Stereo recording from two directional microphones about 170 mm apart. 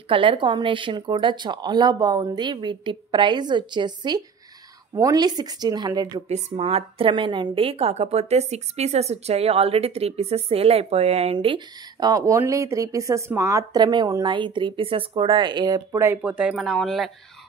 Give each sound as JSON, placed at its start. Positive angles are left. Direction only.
{"t": 0.1, "sound": "speech", "side_deg": -30}
{"t": 6.2, "sound": "a woman's voice", "side_deg": -35}
{"t": 16.2, "sound": "speech", "side_deg": -5}